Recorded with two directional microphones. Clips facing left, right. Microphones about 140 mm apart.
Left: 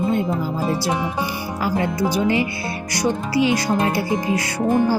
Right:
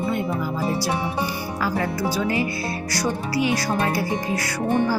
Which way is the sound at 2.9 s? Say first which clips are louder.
Left 5 dB; 25° left (ahead or behind).